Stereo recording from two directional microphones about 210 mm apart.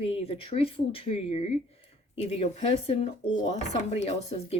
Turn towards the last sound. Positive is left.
turn(degrees=30)  # may be behind; listen again after turning